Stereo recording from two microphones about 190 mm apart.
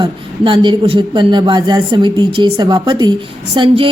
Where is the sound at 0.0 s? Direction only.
25° right (ahead or behind).